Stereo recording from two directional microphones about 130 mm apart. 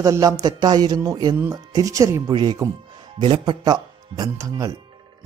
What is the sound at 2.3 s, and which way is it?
Speech, 35° right (ahead or behind).